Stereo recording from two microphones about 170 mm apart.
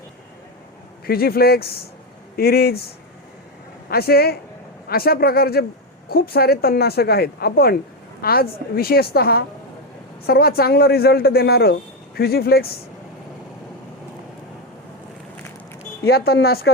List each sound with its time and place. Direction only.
1.0 s a man's voice: 65° left (ahead or behind)
3.8 s a man's voice: 65° left (ahead or behind)
16.0 s a woman's voice: 70° left (ahead or behind)